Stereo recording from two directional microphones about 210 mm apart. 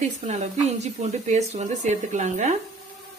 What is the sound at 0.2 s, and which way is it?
Speech, 35° right (ahead or behind).